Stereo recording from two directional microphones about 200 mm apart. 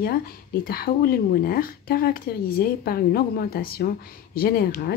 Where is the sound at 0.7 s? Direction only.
50° left (ahead or behind).